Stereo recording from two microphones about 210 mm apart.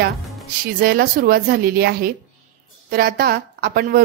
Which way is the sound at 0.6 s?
45° right (ahead or behind).